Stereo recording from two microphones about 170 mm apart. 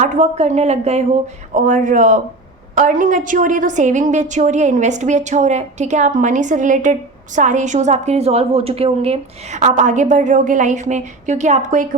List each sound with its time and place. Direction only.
0.0 s a woman's voice: 45° right (ahead or behind)
1.5 s a woman's voice: 50° right (ahead or behind)